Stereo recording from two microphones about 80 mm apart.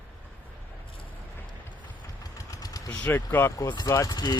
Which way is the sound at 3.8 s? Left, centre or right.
Left.